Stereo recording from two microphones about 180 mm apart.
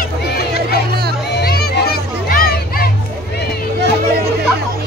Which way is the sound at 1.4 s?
60° left (ahead or behind).